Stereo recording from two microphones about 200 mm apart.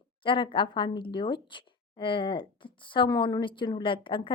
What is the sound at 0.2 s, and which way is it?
Speech, 25° left (ahead or behind).